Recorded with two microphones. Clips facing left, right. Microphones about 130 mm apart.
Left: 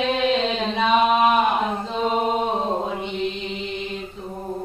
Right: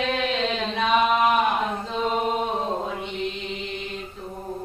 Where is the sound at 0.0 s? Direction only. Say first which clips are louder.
Left 4 dB; 15° left (ahead or behind).